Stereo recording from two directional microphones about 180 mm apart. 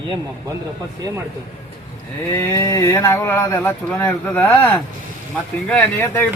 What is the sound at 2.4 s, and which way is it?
Speech, 10° left (ahead or behind).